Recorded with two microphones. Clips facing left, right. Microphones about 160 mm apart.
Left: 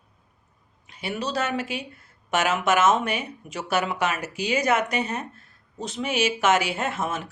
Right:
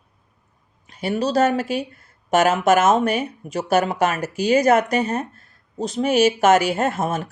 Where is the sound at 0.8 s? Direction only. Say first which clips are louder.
Right 8 dB; 40° right (ahead or behind).